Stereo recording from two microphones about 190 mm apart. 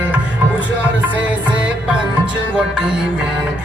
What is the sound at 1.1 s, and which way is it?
Music, 5° right (ahead or behind).